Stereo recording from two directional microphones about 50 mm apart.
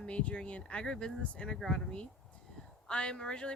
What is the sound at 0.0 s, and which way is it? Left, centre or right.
A woman's voice, left.